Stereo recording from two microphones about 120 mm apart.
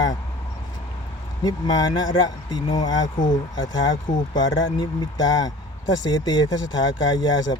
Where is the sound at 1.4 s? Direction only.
35° left (ahead or behind).